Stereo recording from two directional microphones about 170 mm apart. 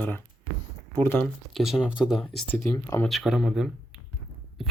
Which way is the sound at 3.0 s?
Centre (ahead or behind).